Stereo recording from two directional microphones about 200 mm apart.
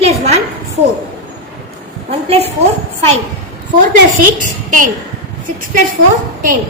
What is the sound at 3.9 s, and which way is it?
A child's voice, 40° right (ahead or behind).